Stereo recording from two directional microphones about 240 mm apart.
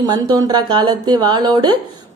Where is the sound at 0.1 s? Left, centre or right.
Centre.